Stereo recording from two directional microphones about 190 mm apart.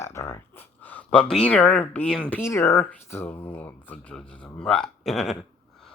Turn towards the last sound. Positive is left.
turn(degrees=0)  # may be behind; listen again after turning